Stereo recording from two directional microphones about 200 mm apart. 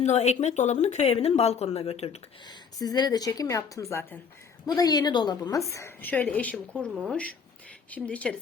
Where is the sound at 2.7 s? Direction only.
20° left (ahead or behind).